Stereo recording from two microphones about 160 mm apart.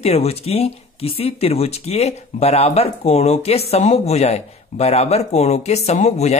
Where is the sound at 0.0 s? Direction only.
40° left (ahead or behind).